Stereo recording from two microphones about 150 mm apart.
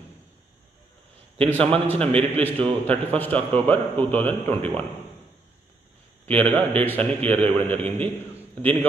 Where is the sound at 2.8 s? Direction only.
10° left (ahead or behind).